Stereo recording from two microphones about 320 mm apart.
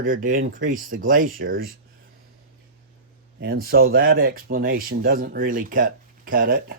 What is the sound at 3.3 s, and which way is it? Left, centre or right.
Speech, right.